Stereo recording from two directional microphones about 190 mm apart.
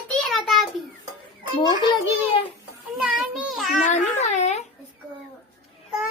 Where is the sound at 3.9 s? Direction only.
35° left (ahead or behind).